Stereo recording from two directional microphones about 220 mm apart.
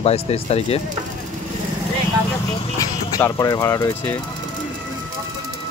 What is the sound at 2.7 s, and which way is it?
Speech, 15° left (ahead or behind).